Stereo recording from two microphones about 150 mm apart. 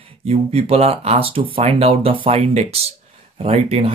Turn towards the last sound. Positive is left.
turn(degrees=-40)  # may be behind; listen again after turning